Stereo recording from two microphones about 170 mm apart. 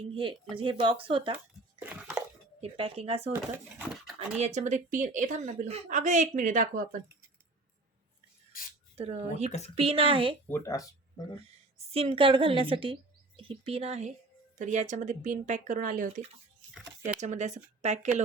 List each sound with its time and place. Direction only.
0.1 s speech: 30° right (ahead or behind)
1.8 s a sound: 10° right (ahead or behind)
2.6 s speech: 35° right (ahead or behind)
3.8 s speech: 5° right (ahead or behind)
4.4 s a woman's voice: 40° right (ahead or behind)
9.0 s speech: 40° right (ahead or behind)
9.5 s speech: 40° left (ahead or behind)
9.7 s speech: 35° right (ahead or behind)
10.5 s speech: 15° left (ahead or behind)
11.9 s a woman's voice: 35° right (ahead or behind); by 16.6 s 50° right (ahead or behind)
16.8 s a sound: 15° right (ahead or behind)
17.2 s a woman's voice: 45° right (ahead or behind)